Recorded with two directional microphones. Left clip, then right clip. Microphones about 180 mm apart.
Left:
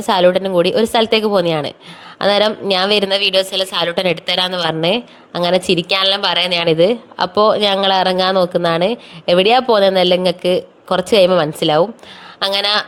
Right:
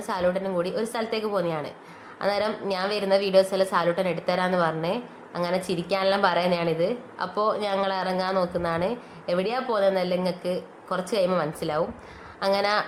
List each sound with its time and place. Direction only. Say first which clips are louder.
0.0 s a woman's voice: left 13 dB; 45° left (ahead or behind)